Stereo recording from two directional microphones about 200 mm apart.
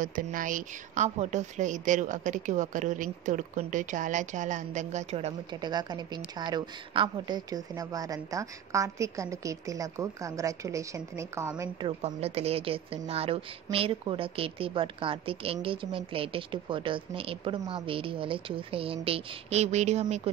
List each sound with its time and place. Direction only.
0.0 s a woman's voice: 40° right (ahead or behind); by 11.9 s 15° right (ahead or behind)
12.0 s a woman's voice: 30° right (ahead or behind)